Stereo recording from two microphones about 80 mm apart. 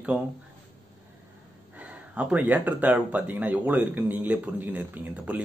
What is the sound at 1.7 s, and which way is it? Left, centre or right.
Speech, centre.